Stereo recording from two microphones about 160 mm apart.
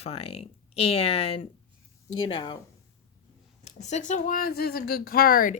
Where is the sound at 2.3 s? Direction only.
30° left (ahead or behind).